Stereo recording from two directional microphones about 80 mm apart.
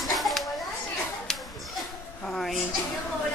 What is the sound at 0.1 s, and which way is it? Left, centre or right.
Children playing, centre.